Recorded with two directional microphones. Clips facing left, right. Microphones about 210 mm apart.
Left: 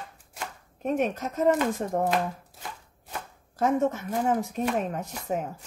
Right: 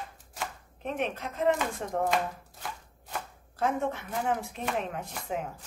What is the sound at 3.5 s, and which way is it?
A woman's voice, 45° left (ahead or behind).